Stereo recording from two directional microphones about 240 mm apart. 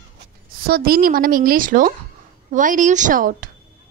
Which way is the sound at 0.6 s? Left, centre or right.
Right.